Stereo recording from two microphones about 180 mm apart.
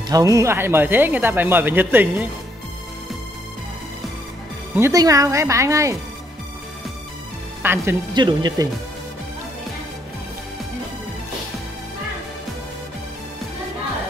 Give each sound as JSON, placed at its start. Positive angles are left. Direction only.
{"t": 0.1, "sound": "speech", "side_deg": -20}
{"t": 4.7, "sound": "speech", "side_deg": -15}
{"t": 7.6, "sound": "speech", "side_deg": -10}
{"t": 8.1, "sound": "speech", "side_deg": -25}